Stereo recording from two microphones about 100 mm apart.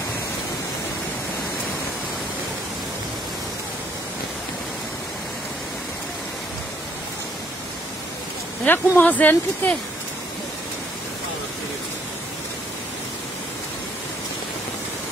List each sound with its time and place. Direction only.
8.6 s speech: 20° left (ahead or behind)